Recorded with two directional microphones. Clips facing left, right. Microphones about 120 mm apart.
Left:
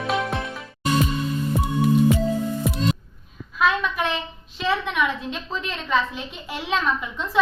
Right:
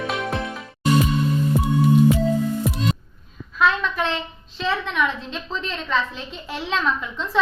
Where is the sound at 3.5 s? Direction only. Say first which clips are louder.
Right 1 dB; 10° left (ahead or behind).